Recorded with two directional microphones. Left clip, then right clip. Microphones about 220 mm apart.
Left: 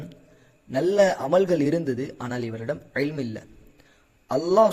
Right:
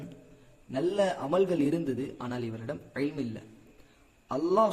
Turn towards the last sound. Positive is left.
turn(degrees=25)  # may be behind; listen again after turning